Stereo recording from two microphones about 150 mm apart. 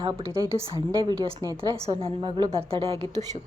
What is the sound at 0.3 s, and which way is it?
Speech, 20° right (ahead or behind).